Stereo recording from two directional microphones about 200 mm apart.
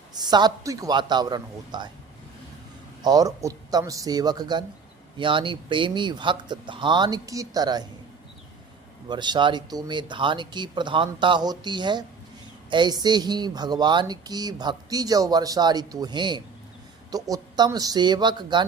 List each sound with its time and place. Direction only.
0.1 s speech: 20° right (ahead or behind)
3.0 s speech: 20° right (ahead or behind)
9.0 s speech: 20° right (ahead or behind)